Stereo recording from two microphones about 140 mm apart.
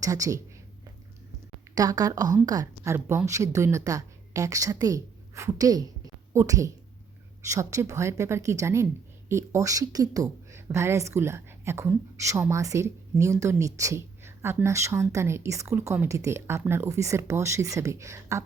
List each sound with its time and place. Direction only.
0.0 s speech: 25° right (ahead or behind)
1.7 s speech: 25° right (ahead or behind)